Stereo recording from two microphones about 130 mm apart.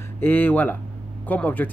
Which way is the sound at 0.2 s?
15° left (ahead or behind).